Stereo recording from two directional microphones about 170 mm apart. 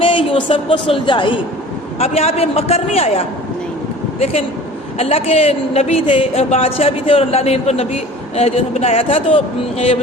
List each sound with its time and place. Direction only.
0.0 s a woman's voice: 30° left (ahead or behind)